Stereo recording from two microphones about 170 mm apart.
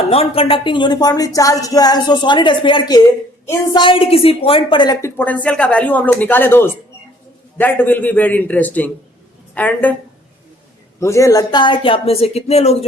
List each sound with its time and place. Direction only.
0.1 s a woman's voice: 35° left (ahead or behind); by 9.9 s 10° left (ahead or behind)
11.0 s speech: 20° left (ahead or behind); by 12.7 s 40° left (ahead or behind)